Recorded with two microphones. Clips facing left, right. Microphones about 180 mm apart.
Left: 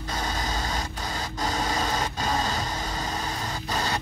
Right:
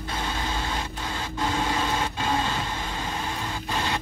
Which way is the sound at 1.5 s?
40° left (ahead or behind).